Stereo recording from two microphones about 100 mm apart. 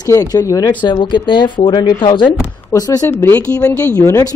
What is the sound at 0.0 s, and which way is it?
Speech, 35° left (ahead or behind).